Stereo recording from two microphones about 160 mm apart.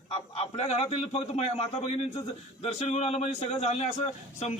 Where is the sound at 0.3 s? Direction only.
40° left (ahead or behind).